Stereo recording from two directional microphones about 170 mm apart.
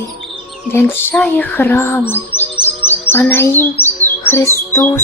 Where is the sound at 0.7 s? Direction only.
15° left (ahead or behind).